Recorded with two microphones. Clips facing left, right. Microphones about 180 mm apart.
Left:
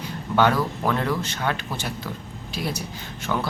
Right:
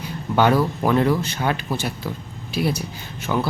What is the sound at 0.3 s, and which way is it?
A man's voice, 15° right (ahead or behind).